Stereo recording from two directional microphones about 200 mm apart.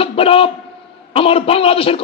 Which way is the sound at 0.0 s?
30° left (ahead or behind).